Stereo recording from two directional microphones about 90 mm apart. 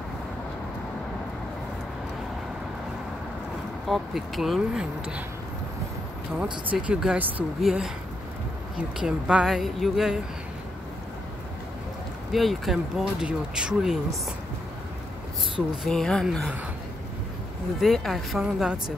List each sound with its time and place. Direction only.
3.9 s speech: centre (ahead or behind)
6.3 s speech: 15° right (ahead or behind)
7.6 s speech: 5° right (ahead or behind)
12.3 s speech: centre (ahead or behind)
15.8 s speech: 5° left (ahead or behind)
17.7 s speech: centre (ahead or behind)